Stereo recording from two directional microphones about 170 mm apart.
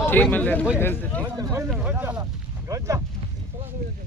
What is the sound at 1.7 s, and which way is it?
Speech, 5° right (ahead or behind).